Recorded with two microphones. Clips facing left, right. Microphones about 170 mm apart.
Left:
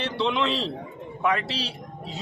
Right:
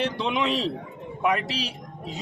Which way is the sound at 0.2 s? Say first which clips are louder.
Even; 10° right (ahead or behind).